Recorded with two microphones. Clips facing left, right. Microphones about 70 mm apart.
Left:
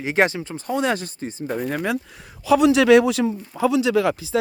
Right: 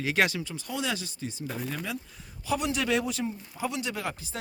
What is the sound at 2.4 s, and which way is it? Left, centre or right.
A man's voice, left.